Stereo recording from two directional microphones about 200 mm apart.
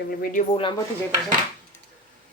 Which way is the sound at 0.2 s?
45° left (ahead or behind).